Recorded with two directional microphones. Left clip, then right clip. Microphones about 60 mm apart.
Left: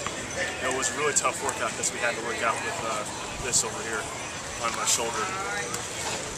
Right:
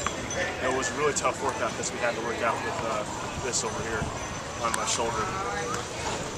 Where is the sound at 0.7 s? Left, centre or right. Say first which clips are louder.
Even; centre.